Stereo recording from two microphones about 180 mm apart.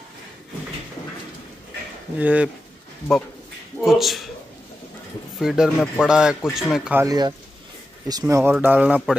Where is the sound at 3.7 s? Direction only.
Centre (ahead or behind).